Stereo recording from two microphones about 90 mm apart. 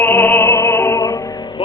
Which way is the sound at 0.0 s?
25° left (ahead or behind).